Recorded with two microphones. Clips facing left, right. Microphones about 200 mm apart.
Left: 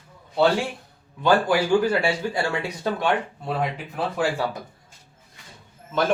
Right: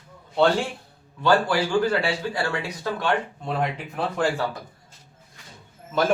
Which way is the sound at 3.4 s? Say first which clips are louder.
Even; centre (ahead or behind).